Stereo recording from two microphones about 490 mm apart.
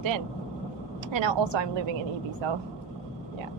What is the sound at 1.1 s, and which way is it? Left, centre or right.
A woman's voice, right.